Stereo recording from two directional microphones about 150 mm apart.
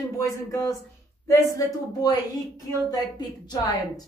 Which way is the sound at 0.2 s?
20° left (ahead or behind).